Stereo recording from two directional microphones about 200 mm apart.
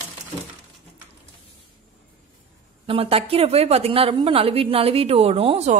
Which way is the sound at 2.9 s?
30° right (ahead or behind).